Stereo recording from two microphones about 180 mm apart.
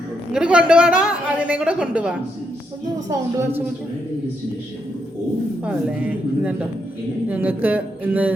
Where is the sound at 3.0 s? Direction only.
15° right (ahead or behind).